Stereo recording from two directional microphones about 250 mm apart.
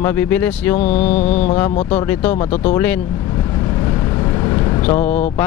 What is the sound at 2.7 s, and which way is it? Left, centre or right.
Speech, centre.